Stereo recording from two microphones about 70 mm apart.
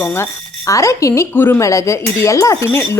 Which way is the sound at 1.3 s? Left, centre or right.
Left.